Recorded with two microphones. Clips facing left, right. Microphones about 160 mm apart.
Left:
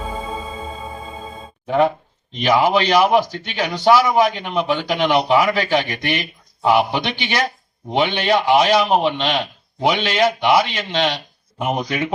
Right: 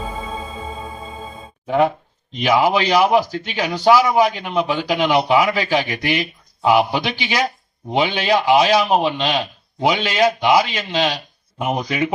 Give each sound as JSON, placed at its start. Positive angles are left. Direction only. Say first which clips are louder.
{"t": 1.6, "sound": "speech", "louder": "even", "side_deg": -5}